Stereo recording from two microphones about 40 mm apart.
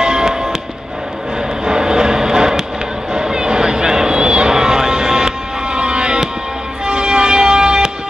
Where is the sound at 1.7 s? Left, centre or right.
Centre.